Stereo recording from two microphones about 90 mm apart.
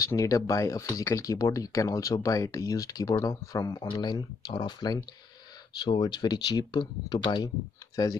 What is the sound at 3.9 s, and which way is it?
Speech, 55° left (ahead or behind).